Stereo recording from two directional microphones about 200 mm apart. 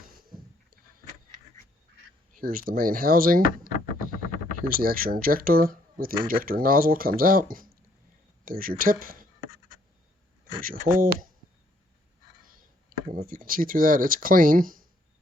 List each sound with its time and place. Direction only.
2.3 s speech: 45° right (ahead or behind)
11.0 s speech: 45° right (ahead or behind)
13.1 s speech: 45° right (ahead or behind)